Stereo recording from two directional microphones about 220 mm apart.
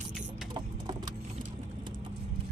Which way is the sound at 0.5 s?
20° right (ahead or behind).